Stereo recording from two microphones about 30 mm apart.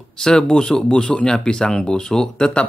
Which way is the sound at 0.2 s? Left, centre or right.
Left.